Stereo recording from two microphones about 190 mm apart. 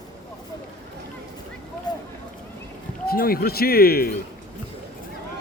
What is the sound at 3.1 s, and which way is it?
Speech, 50° left (ahead or behind).